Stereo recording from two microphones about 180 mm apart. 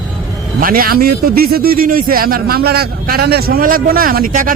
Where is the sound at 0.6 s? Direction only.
55° right (ahead or behind).